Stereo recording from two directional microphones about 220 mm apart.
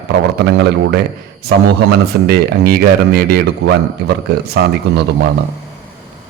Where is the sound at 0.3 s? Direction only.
50° right (ahead or behind).